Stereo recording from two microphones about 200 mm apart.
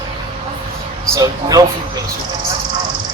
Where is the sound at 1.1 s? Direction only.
15° right (ahead or behind).